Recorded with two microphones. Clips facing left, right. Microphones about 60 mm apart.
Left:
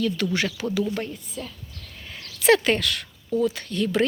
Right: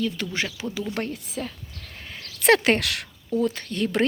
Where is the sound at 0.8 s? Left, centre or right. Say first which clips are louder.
Left 1 dB; right.